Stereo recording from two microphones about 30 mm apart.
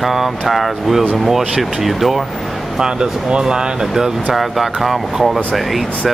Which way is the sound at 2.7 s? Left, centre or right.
Right.